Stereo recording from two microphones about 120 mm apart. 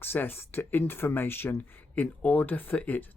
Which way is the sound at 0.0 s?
15° left (ahead or behind).